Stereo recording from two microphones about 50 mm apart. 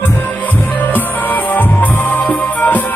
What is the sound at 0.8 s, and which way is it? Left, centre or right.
Music, left.